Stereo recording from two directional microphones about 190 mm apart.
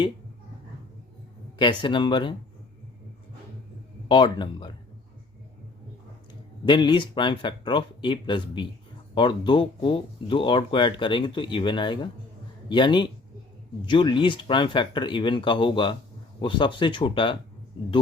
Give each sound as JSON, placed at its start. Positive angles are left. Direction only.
{"t": 1.5, "sound": "speech", "side_deg": 25}
{"t": 4.1, "sound": "speech", "side_deg": 25}
{"t": 6.7, "sound": "a man's voice", "side_deg": 25}